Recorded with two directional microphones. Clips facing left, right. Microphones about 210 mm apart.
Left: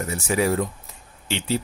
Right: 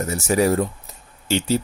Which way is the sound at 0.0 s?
40° right (ahead or behind).